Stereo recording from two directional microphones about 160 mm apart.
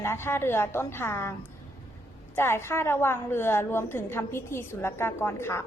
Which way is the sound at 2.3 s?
15° left (ahead or behind).